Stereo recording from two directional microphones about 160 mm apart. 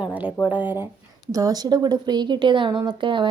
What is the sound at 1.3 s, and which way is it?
A woman's voice, 25° right (ahead or behind).